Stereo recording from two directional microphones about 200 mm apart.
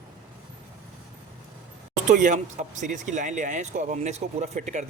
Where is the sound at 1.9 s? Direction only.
40° right (ahead or behind).